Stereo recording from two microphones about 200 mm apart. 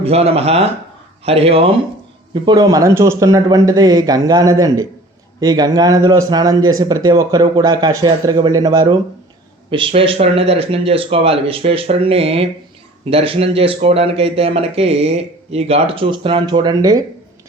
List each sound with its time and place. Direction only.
0.0 s speech: 30° right (ahead or behind)